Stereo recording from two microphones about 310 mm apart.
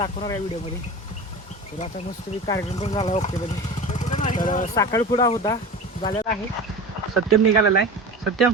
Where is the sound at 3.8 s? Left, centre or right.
Left.